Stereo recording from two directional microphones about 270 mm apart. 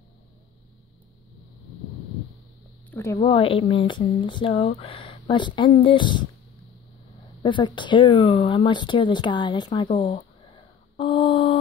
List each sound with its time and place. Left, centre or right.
2.9 s a sound: centre
3.2 s speech: left
7.4 s speech: centre